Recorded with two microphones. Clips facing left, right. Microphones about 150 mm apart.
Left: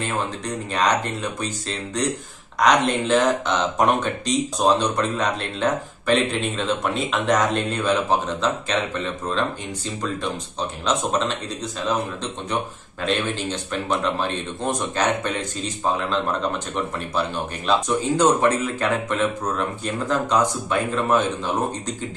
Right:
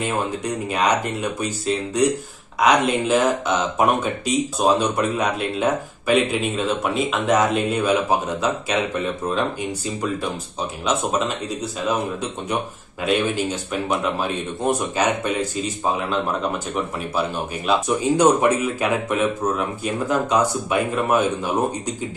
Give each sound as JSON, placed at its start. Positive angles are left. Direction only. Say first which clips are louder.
{"t": 0.7, "sound": "speech", "louder": "even", "side_deg": -10}
{"t": 17.6, "sound": "speech", "louder": "right 1 dB", "side_deg": -10}